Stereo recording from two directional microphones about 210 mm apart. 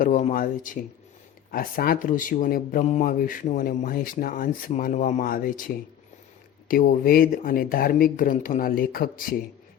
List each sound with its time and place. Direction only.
0.0 s speech: 35° left (ahead or behind)